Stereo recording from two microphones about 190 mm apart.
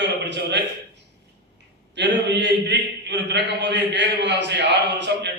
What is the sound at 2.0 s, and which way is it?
A man's voice, 65° right (ahead or behind).